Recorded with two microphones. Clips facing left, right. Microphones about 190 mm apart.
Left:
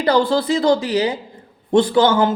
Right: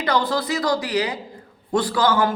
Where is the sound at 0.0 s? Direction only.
30° left (ahead or behind).